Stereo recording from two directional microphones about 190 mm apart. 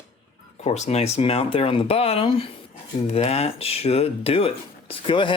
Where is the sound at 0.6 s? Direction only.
35° left (ahead or behind).